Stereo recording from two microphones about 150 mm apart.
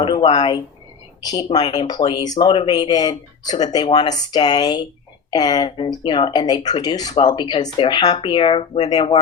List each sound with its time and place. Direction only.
0.0 s speech: 35° left (ahead or behind)